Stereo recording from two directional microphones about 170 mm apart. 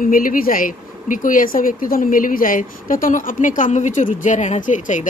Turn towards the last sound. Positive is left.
turn(degrees=45)  # may be behind; listen again after turning